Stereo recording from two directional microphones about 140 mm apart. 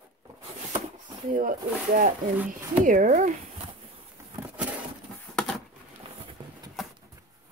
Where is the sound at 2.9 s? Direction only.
65° right (ahead or behind).